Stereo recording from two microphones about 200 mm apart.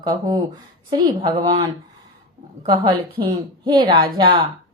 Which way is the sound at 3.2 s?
20° right (ahead or behind).